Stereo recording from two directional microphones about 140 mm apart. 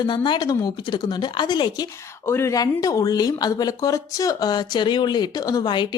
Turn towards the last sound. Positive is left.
turn(degrees=30)  # may be behind; listen again after turning